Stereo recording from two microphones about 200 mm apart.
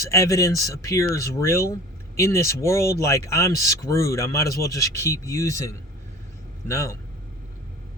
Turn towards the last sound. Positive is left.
turn(degrees=15)  # may be behind; listen again after turning